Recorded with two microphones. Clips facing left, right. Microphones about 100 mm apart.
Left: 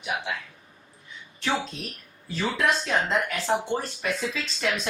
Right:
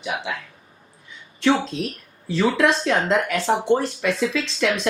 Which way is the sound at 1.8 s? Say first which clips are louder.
Right 10 dB; 90° right.